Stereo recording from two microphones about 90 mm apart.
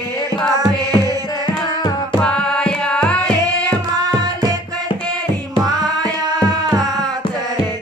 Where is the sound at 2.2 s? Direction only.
10° left (ahead or behind).